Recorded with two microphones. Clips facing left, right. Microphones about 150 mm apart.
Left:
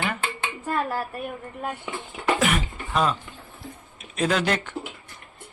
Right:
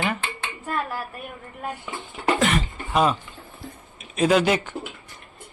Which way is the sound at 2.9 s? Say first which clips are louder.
Right 3 dB; 10° right (ahead or behind).